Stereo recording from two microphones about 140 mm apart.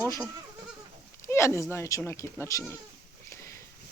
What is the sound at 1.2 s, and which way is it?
Speech, 20° left (ahead or behind).